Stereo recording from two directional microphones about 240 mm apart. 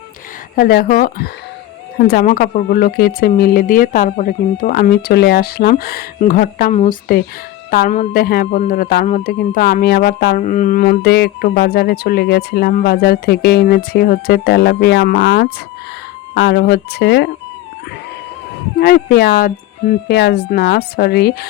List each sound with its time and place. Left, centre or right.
0.5 s speech: left
18.8 s speech: left